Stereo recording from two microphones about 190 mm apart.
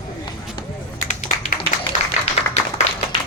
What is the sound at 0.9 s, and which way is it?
Tap, 40° left (ahead or behind).